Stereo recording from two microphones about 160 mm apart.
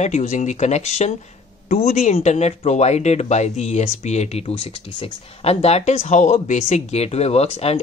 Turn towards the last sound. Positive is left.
turn(degrees=40)  # may be behind; listen again after turning